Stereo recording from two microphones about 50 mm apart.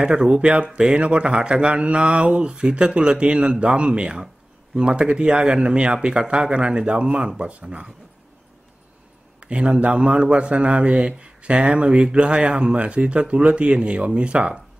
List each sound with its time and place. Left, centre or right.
0.0 s speech: centre
9.4 s a man's voice: right